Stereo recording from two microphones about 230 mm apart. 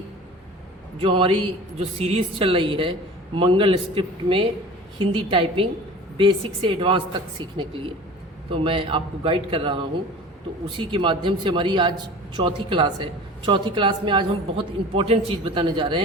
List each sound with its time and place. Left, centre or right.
0.9 s speech: right